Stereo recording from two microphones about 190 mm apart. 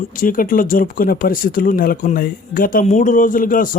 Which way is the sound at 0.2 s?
45° left (ahead or behind).